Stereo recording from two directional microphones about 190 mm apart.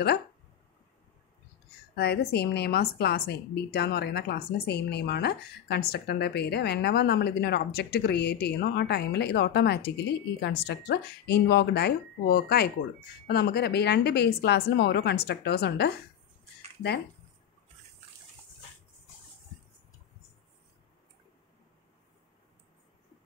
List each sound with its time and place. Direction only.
2.0 s a woman's voice: 60° left (ahead or behind)